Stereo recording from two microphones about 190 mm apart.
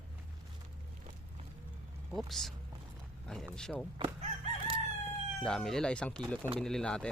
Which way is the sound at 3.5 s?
5° left (ahead or behind).